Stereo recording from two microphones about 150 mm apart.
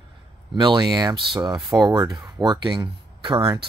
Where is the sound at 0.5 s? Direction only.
30° right (ahead or behind).